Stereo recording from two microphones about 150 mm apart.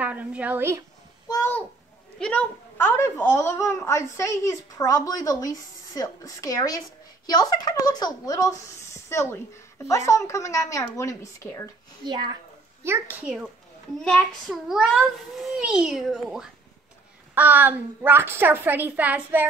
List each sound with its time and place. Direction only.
0.0 s a woman's voice: 10° right (ahead or behind)
1.3 s a child's voice: 15° left (ahead or behind)
12.0 s speech: 30° right (ahead or behind)
12.8 s a woman's voice: 15° right (ahead or behind)
14.5 s a child's voice: 5° right (ahead or behind)